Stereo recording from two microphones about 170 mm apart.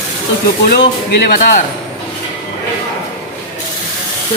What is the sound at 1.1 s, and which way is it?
Speech, 75° left (ahead or behind).